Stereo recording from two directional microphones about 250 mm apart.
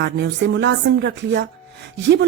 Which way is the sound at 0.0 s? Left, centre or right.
Right.